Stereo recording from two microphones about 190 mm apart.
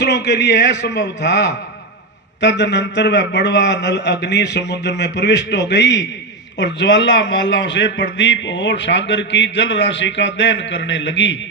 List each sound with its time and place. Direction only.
0.0 s a man's voice: 65° left (ahead or behind)